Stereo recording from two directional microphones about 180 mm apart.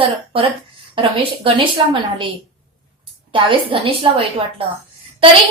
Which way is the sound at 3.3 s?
30° right (ahead or behind).